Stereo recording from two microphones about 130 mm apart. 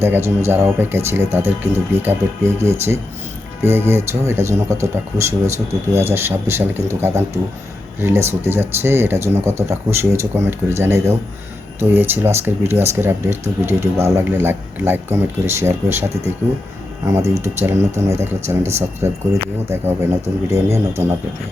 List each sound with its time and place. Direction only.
0.0 s speech: 20° right (ahead or behind)